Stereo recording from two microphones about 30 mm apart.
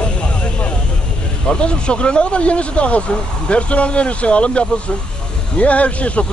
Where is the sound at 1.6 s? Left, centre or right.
Left.